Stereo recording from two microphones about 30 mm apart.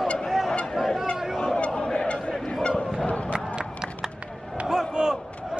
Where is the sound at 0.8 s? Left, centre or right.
Centre.